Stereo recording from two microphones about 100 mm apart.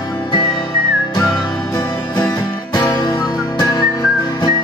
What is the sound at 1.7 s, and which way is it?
Music, 40° left (ahead or behind).